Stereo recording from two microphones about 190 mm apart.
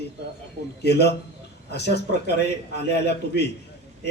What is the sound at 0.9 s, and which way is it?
Speech, 60° left (ahead or behind).